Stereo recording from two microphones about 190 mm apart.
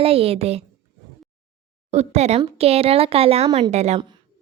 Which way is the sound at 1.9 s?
35° right (ahead or behind).